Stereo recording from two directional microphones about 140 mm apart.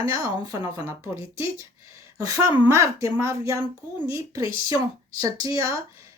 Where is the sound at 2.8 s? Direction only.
20° right (ahead or behind).